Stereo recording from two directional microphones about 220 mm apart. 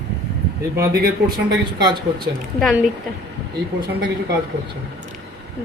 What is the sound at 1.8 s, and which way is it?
Speech, 20° right (ahead or behind).